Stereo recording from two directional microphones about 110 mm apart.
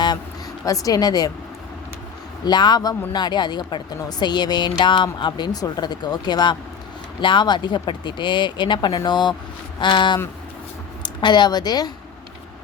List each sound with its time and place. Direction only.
0.6 s speech: 30° left (ahead or behind)
2.4 s speech: 40° left (ahead or behind)